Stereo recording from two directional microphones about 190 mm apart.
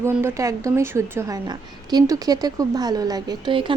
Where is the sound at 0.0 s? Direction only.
15° right (ahead or behind).